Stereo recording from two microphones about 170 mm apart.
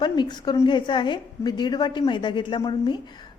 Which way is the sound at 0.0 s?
25° left (ahead or behind).